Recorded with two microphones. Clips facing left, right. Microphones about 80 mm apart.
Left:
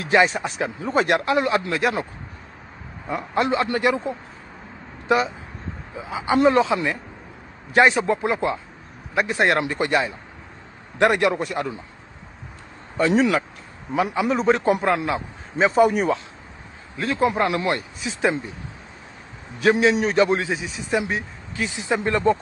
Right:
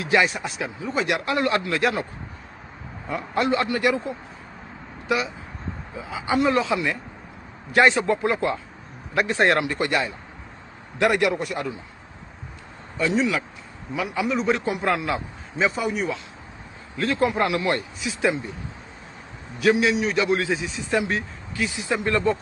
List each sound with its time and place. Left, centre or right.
0.0 s a man's voice: left
0.7 s a man's voice: left
1.2 s speech: left
3.1 s speech: left
9.6 s speech: left
12.9 s a man's voice: left
14.8 s speech: left
15.5 s a man's voice: left
16.9 s a man's voice: left
19.6 s a man's voice: left
20.3 s speech: left